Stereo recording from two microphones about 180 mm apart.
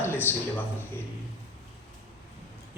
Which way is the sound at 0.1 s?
10° left (ahead or behind).